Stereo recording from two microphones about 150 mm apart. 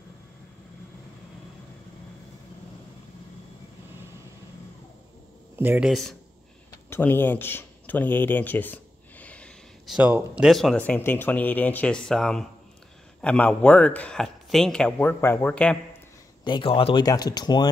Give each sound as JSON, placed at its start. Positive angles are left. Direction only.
{"t": 5.6, "sound": "speech", "side_deg": -10}
{"t": 5.9, "sound": "speech", "side_deg": 0}
{"t": 6.9, "sound": "speech", "side_deg": 15}
{"t": 9.8, "sound": "speech", "side_deg": -10}
{"t": 10.8, "sound": "speech", "side_deg": 15}
{"t": 16.4, "sound": "speech", "side_deg": 35}
{"t": 17.0, "sound": "speech", "side_deg": 25}